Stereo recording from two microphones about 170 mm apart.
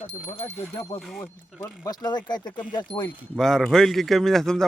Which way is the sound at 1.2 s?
20° left (ahead or behind).